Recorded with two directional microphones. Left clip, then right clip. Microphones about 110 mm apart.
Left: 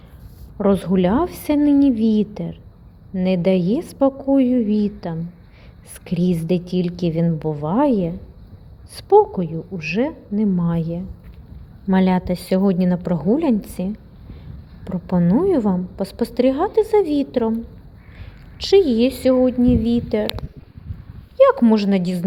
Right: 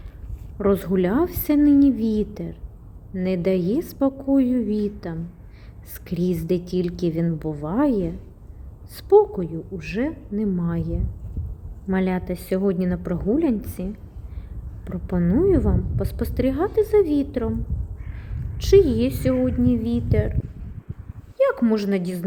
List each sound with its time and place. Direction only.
0.6 s a woman's voice: 10° left (ahead or behind)
11.9 s a woman's voice: 35° left (ahead or behind)
18.6 s a woman's voice: 25° left (ahead or behind)
21.3 s a woman's voice: 30° left (ahead or behind)